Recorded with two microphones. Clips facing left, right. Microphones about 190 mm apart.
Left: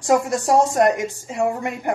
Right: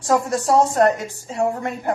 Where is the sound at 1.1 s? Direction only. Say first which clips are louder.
Even; 10° left (ahead or behind).